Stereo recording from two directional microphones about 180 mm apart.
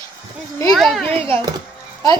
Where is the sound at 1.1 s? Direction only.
30° right (ahead or behind).